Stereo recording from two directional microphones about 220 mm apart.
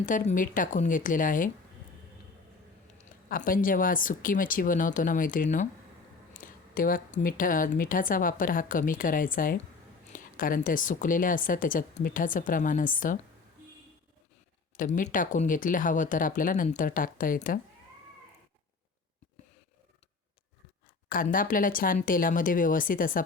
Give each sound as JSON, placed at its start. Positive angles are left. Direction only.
{"t": 0.0, "sound": "speech", "side_deg": 35}
{"t": 3.0, "sound": "speech", "side_deg": 40}
{"t": 14.8, "sound": "speech", "side_deg": 35}
{"t": 21.1, "sound": "speech", "side_deg": 40}